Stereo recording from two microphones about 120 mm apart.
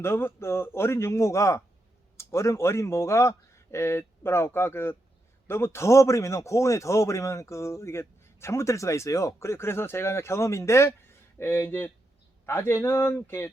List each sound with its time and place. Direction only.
0.0 s a man's voice: 20° left (ahead or behind)